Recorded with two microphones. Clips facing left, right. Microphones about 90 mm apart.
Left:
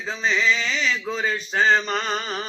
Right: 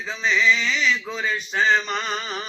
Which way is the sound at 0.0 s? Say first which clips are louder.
Right 1 dB; 35° left (ahead or behind).